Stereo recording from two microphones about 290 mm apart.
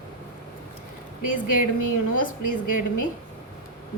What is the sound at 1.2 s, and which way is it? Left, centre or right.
A woman's voice, left.